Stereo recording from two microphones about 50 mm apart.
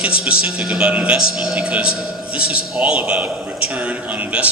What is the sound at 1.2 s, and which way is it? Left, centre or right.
A man's voice, centre.